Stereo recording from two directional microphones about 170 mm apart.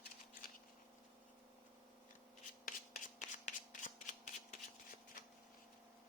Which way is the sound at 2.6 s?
50° left (ahead or behind).